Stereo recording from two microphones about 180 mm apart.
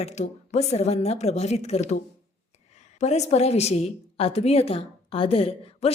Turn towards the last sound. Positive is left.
turn(degrees=30)  # may be behind; listen again after turning